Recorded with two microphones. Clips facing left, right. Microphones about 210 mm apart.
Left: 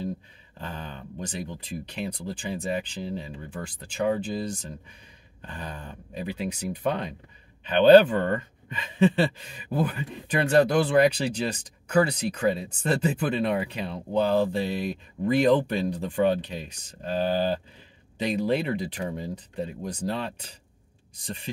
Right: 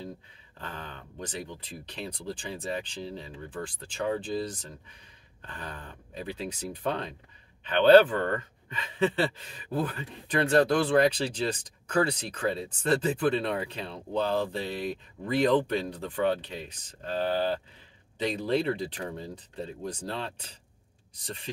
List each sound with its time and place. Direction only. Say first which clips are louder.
0.6 s speech: left 4 dB; 15° left (ahead or behind)